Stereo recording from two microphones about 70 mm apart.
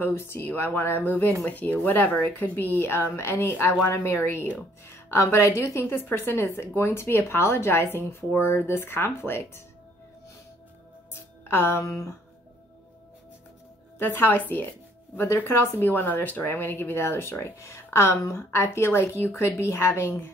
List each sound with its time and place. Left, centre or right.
0.0 s a woman's voice: left
11.1 s music: left
13.9 s a woman's voice: left
17.6 s a woman's voice: left